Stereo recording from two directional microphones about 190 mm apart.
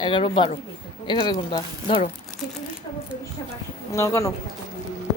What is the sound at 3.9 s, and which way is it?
Speech, 15° left (ahead or behind).